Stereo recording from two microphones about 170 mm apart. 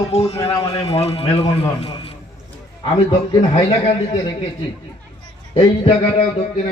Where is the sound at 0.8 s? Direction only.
40° left (ahead or behind).